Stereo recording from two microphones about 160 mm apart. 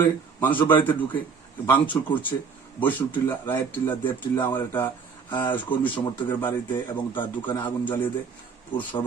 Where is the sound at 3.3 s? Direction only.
15° left (ahead or behind).